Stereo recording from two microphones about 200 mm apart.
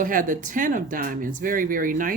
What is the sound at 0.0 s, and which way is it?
Speech, 45° right (ahead or behind).